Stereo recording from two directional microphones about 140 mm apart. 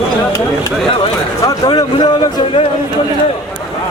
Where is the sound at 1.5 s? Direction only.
30° left (ahead or behind).